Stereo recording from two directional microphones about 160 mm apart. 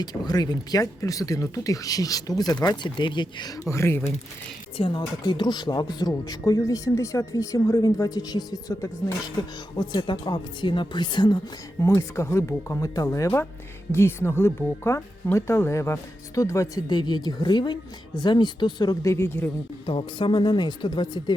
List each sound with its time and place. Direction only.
0.0 s speech: 25° left (ahead or behind)
4.8 s speech: 30° left (ahead or behind)
11.8 s speech: 15° left (ahead or behind)
19.8 s speech: 35° left (ahead or behind)